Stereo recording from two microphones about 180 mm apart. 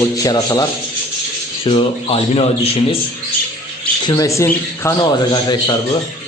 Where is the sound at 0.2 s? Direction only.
20° left (ahead or behind).